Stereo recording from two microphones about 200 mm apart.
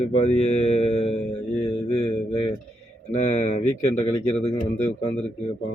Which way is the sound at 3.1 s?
40° left (ahead or behind).